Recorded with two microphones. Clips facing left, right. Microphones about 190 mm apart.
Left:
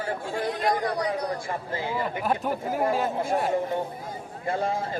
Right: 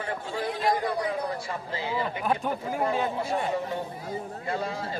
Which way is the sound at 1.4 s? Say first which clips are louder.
Left 2 dB; 50° left (ahead or behind).